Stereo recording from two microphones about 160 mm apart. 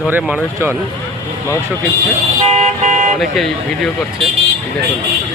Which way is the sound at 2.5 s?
50° right (ahead or behind).